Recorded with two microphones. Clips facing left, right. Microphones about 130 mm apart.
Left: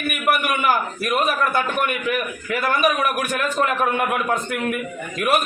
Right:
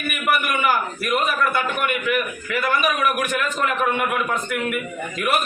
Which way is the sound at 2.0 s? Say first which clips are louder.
Even; 35° left (ahead or behind).